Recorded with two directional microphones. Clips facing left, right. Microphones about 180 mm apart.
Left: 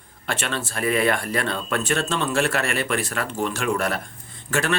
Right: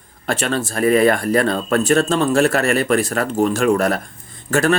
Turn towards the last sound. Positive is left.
turn(degrees=-40)  # may be behind; listen again after turning